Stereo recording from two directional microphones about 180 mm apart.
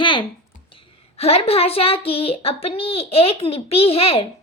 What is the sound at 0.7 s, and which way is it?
A woman's voice, 30° left (ahead or behind).